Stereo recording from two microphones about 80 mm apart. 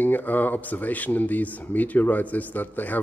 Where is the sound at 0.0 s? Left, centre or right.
Left.